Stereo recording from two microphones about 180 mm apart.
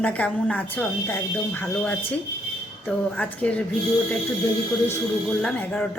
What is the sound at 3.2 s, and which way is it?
Speech, 5° left (ahead or behind).